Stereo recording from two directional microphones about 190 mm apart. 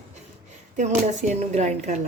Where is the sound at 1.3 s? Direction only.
35° right (ahead or behind).